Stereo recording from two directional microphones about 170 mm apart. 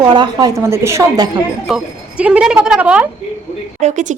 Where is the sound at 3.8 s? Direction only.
45° right (ahead or behind).